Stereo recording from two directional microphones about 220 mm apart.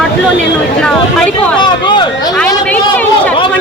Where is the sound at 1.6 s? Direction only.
20° left (ahead or behind).